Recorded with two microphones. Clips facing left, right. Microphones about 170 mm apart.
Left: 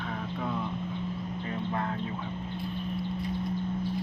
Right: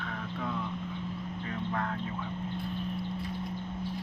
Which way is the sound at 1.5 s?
20° left (ahead or behind).